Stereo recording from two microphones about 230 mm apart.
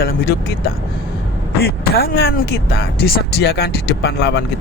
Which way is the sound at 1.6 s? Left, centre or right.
Left.